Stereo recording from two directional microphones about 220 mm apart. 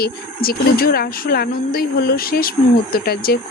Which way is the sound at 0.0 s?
45° left (ahead or behind).